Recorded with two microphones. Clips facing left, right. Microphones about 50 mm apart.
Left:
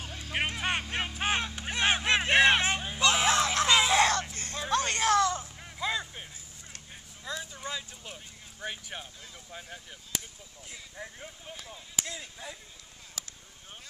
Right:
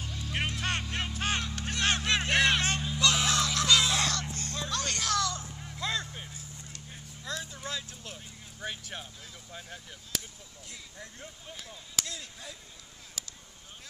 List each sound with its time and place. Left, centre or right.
0.3 s vehicle: left
0.8 s music: left
4.4 s vehicle: left; by 9.0 s centre
9.5 s speech: centre